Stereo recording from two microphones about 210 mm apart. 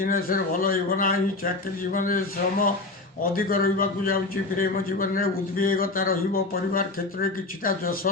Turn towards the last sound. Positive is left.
turn(degrees=45)  # may be behind; listen again after turning